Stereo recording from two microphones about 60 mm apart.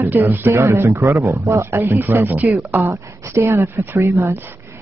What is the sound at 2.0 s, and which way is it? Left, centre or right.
Speech, right.